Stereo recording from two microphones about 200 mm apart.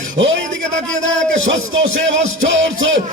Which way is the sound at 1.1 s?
70° right (ahead or behind).